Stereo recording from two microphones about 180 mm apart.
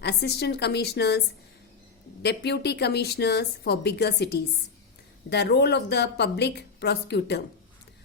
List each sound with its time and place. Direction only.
0.0 s speech: 65° left (ahead or behind)
2.2 s a woman's voice: 70° left (ahead or behind)